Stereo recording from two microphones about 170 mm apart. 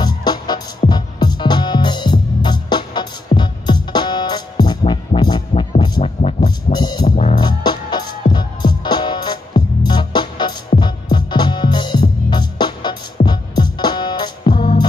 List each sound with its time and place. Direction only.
0.0 s music: 25° left (ahead or behind)
7.1 s music: 40° left (ahead or behind)
7.3 s music: 25° left (ahead or behind)